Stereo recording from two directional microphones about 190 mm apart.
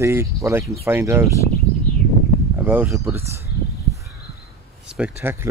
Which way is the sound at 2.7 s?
10° right (ahead or behind).